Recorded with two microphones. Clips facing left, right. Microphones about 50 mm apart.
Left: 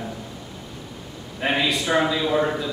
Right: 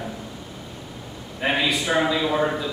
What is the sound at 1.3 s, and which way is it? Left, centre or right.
A man's voice, centre.